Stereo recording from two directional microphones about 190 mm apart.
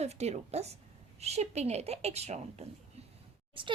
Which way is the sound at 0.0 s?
35° right (ahead or behind).